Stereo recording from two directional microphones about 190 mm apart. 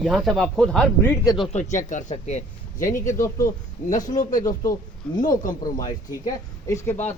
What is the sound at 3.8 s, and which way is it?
Speech, 15° left (ahead or behind).